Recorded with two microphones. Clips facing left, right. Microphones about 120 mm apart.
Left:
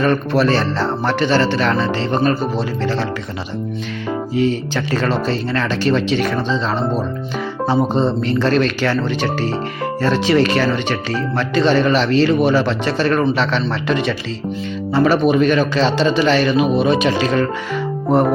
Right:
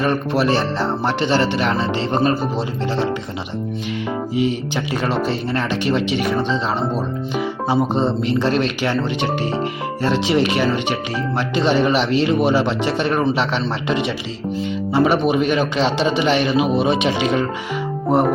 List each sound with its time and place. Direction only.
0.0 s speech: 20° right (ahead or behind)
4.4 s speech: 25° right (ahead or behind)
7.9 s speech: 20° right (ahead or behind)